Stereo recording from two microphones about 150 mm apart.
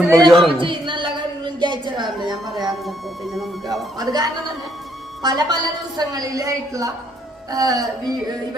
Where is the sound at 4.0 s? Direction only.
25° right (ahead or behind).